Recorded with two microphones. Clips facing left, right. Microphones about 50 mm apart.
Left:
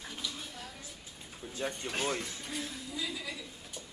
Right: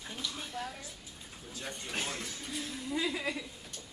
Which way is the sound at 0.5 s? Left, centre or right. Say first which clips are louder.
Right 7 dB; centre.